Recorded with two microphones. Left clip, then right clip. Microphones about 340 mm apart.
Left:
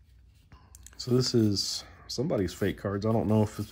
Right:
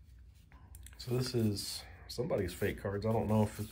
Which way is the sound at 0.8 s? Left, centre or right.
Centre.